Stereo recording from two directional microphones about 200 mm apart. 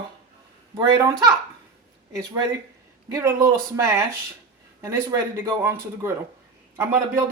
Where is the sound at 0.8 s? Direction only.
15° right (ahead or behind).